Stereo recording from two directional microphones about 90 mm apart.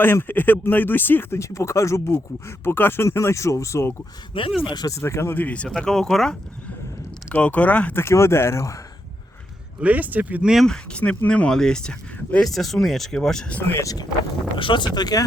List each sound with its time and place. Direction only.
0.0 s speech: 25° left (ahead or behind)
4.3 s speech: 75° left (ahead or behind)
4.7 s speech: 45° left (ahead or behind); by 5.6 s 20° left (ahead or behind)
5.6 s speech: 5° left (ahead or behind)
7.3 s speech: 15° left (ahead or behind)
8.0 s speech: 30° left (ahead or behind)
9.8 s speech: 20° right (ahead or behind)
10.7 s speech: 10° left (ahead or behind)
13.8 s speech: 45° left (ahead or behind)
14.5 s speech: 65° left (ahead or behind)
14.9 s speech: 50° left (ahead or behind)